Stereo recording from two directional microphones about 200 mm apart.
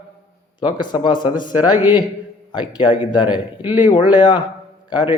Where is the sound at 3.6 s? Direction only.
10° right (ahead or behind).